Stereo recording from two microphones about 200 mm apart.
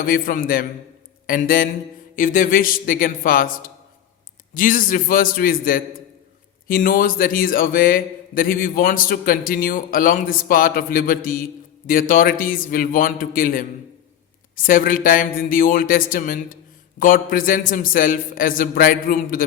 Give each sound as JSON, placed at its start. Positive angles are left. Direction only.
{"t": 0.0, "sound": "speech", "side_deg": 45}